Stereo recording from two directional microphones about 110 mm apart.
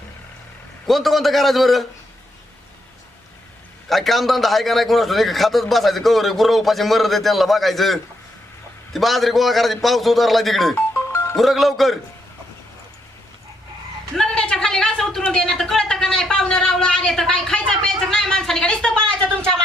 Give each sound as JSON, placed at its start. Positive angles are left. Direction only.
{"t": 0.9, "sound": "a man's voice", "side_deg": 0}
{"t": 3.8, "sound": "a man's voice", "side_deg": 0}
{"t": 10.8, "sound": "music", "side_deg": 20}
{"t": 11.3, "sound": "a man's voice", "side_deg": 0}
{"t": 14.2, "sound": "a sound", "side_deg": 5}